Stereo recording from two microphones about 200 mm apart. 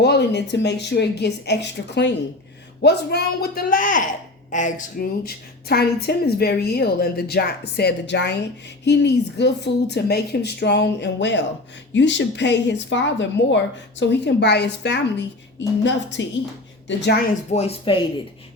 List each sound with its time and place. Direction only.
0.0 s speech: 60° left (ahead or behind)
17.5 s speech: 30° left (ahead or behind)